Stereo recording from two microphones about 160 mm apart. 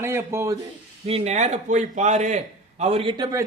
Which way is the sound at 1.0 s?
40° right (ahead or behind).